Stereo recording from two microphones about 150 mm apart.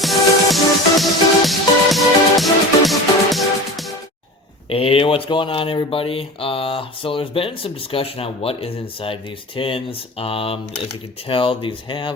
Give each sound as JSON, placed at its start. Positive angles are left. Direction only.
{"t": 0.0, "sound": "music", "side_deg": 0}
{"t": 4.7, "sound": "speech", "side_deg": 40}